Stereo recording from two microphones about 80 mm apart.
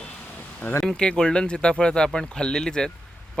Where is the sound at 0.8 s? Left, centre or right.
Centre.